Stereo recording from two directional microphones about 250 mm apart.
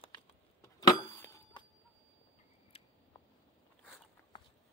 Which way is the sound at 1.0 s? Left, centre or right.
Centre.